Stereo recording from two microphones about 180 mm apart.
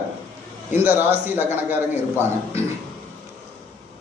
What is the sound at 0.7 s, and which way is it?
A man's voice, 10° right (ahead or behind).